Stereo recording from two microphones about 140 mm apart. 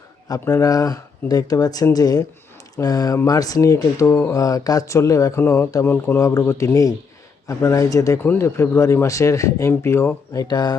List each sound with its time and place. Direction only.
0.3 s speech: 25° left (ahead or behind)
10.4 s speech: 30° left (ahead or behind)